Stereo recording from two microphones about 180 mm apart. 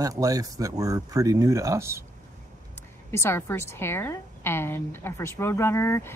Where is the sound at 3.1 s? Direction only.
15° left (ahead or behind).